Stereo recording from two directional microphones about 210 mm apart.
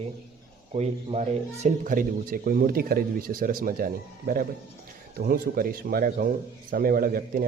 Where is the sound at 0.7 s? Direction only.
30° right (ahead or behind).